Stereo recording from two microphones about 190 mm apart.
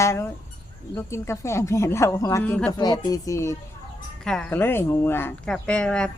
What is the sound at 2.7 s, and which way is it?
Speech, 20° left (ahead or behind).